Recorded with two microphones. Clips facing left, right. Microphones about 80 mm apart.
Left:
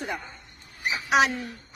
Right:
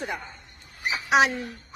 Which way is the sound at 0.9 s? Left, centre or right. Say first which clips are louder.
Right 1 dB; right.